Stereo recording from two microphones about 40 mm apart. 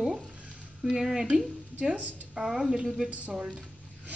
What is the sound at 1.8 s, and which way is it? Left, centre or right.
Speech, right.